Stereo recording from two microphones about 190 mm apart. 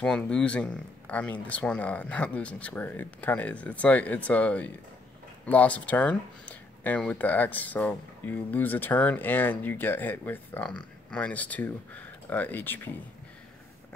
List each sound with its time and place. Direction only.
0.0 s speech: 5° left (ahead or behind)